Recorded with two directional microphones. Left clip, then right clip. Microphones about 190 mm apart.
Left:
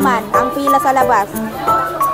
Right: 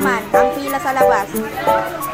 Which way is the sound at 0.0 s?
15° left (ahead or behind).